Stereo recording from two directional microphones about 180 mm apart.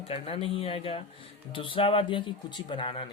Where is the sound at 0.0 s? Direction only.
30° left (ahead or behind).